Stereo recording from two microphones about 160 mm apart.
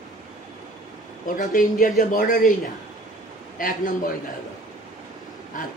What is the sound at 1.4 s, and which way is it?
A man's voice, 55° left (ahead or behind).